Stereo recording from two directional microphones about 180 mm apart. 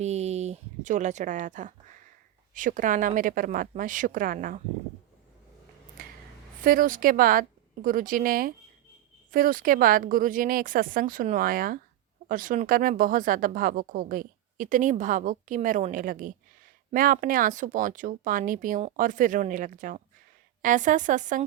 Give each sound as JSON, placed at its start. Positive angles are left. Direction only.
{"t": 0.0, "sound": "speech", "side_deg": -40}
{"t": 6.0, "sound": "a sound", "side_deg": -50}
{"t": 6.7, "sound": "speech", "side_deg": -50}